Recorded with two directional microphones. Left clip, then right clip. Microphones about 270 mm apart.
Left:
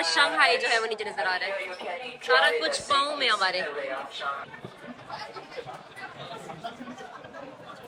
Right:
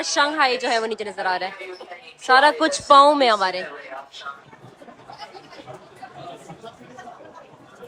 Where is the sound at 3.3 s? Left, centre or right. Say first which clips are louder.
Right 5 dB; centre.